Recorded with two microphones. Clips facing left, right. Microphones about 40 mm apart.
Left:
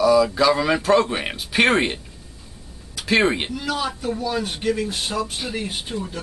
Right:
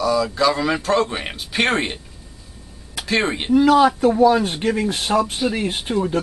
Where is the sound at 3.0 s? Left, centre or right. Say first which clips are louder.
Left 2 dB; centre.